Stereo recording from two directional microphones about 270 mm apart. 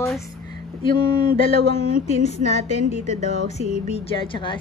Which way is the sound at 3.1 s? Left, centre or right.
Left.